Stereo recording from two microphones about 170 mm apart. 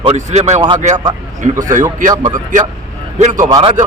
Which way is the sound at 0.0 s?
40° right (ahead or behind).